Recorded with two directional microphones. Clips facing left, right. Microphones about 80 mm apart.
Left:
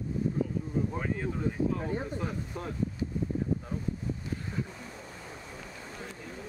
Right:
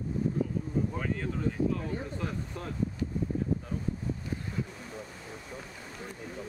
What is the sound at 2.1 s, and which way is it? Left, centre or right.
Speech, centre.